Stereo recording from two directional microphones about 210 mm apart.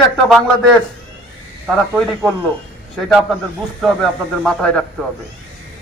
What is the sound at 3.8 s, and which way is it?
A man's voice, centre (ahead or behind).